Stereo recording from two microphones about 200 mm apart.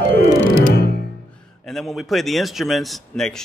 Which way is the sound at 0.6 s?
50° left (ahead or behind).